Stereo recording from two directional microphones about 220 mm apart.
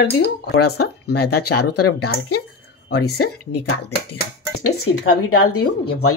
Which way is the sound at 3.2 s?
90° left.